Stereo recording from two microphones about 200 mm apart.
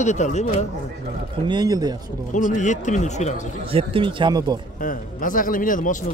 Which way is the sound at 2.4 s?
40° left (ahead or behind).